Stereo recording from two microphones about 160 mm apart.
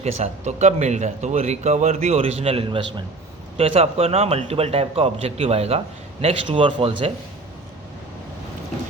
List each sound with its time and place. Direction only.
0.0 s a man's voice: 45° right (ahead or behind)